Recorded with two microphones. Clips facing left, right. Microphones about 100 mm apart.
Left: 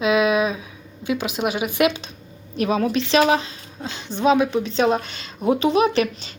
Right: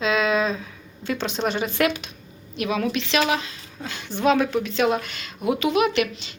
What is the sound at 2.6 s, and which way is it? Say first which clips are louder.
Speech: left 4 dB; 35° left (ahead or behind).